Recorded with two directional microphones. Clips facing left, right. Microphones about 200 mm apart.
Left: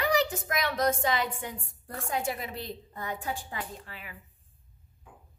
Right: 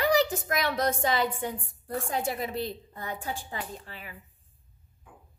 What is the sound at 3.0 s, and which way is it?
A woman's voice, 30° right (ahead or behind).